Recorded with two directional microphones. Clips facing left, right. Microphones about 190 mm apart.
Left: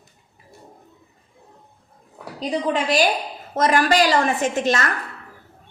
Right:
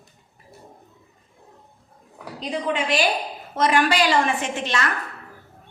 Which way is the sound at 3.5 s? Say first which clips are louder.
Left 2 dB; 40° left (ahead or behind).